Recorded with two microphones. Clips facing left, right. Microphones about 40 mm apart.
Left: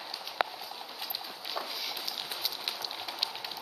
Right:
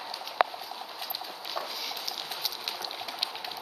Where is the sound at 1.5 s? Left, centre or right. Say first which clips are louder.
Right 1 dB; centre.